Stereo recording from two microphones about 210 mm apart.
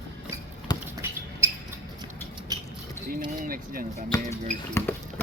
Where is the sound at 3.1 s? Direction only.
40° right (ahead or behind).